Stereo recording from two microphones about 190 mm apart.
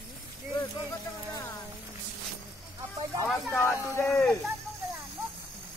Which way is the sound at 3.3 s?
5° left (ahead or behind).